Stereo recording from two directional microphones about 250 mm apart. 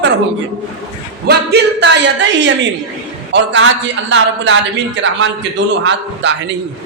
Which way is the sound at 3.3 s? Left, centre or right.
Right.